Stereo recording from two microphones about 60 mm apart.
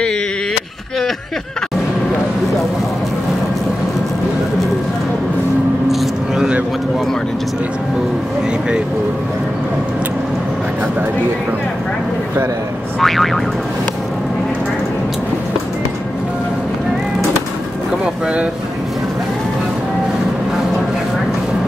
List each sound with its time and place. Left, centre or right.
5.9 s vehicle: centre
13.0 s boing: centre